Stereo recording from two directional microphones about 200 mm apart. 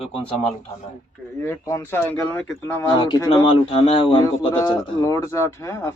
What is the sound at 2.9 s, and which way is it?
Speech, 20° left (ahead or behind).